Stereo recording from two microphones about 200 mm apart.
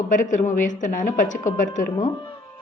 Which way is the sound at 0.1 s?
40° left (ahead or behind).